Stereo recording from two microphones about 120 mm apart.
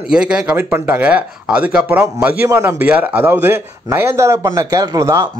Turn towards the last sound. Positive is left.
turn(degrees=-25)  # may be behind; listen again after turning